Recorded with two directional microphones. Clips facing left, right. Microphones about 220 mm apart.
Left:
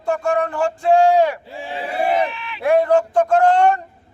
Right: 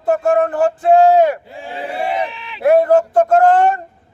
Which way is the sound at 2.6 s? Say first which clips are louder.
Right 4 dB; 45° right (ahead or behind).